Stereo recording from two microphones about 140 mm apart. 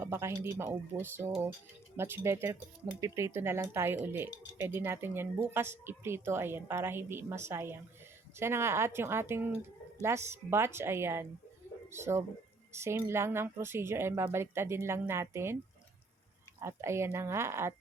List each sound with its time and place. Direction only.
0.0 s a woman's voice: 15° right (ahead or behind)
16.6 s speech: 20° right (ahead or behind)